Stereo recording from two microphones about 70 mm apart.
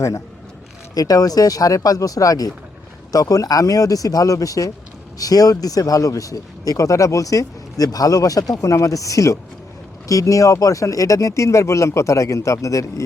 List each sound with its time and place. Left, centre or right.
0.9 s speech: left